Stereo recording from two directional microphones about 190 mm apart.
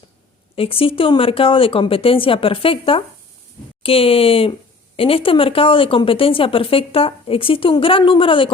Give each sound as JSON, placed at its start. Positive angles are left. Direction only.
{"t": 0.5, "sound": "speech", "side_deg": 30}